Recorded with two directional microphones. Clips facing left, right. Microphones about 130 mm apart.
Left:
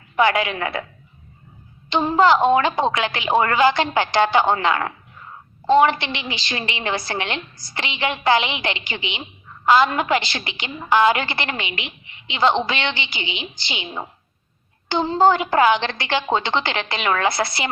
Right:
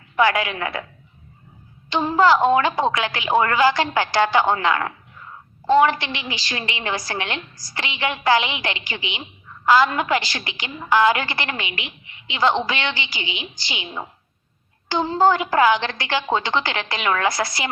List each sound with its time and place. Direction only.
0.2 s a woman's voice: 25° left (ahead or behind)
1.9 s a woman's voice: 20° left (ahead or behind)